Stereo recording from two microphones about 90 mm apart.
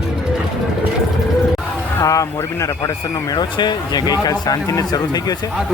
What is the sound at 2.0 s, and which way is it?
Speech, 35° left (ahead or behind).